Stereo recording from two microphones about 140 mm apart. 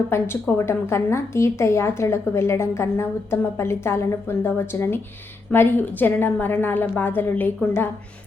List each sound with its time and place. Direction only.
0.1 s a woman's voice: 15° left (ahead or behind)